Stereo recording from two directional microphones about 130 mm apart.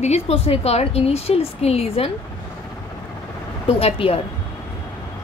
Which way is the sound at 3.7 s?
50° left (ahead or behind).